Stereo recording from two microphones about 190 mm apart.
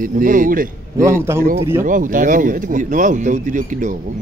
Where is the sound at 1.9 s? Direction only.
45° right (ahead or behind).